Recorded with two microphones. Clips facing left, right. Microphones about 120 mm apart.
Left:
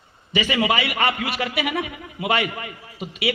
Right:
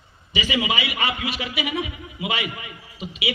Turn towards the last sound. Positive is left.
turn(degrees=50)  # may be behind; listen again after turning